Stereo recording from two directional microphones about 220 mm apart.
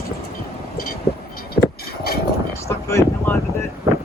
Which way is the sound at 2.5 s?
10° left (ahead or behind).